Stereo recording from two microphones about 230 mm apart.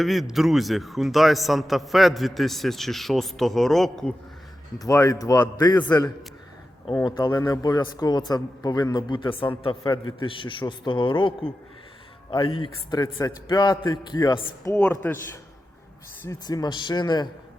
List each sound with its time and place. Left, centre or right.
0.0 s a man's voice: centre
4.8 s a man's voice: centre